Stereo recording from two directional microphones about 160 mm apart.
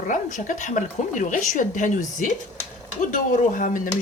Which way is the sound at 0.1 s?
55° left (ahead or behind).